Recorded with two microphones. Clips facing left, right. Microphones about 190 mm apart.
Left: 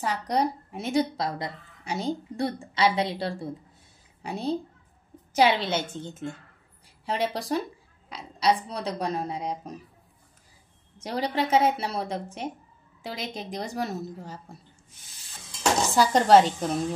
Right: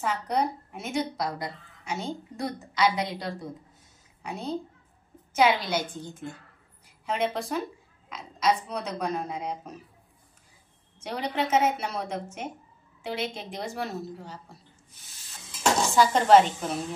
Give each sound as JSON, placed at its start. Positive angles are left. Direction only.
{"t": 0.0, "sound": "a woman's voice", "side_deg": 35}
{"t": 7.1, "sound": "a woman's voice", "side_deg": 35}
{"t": 11.0, "sound": "a woman's voice", "side_deg": 35}
{"t": 16.0, "sound": "a woman's voice", "side_deg": 35}